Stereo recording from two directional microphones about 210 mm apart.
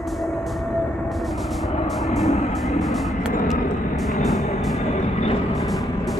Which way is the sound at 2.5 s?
Centre (ahead or behind).